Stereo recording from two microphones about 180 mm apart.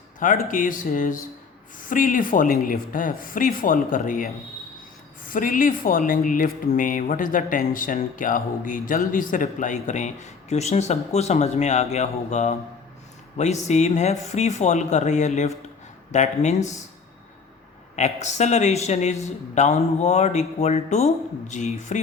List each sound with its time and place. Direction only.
0.2 s speech: 45° left (ahead or behind)
17.9 s speech: 40° left (ahead or behind)